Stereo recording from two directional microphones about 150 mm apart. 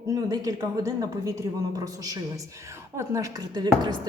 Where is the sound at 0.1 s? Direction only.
25° right (ahead or behind).